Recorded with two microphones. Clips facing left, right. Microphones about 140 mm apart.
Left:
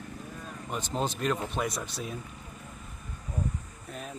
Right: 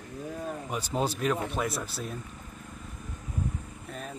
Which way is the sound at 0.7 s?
10° right (ahead or behind).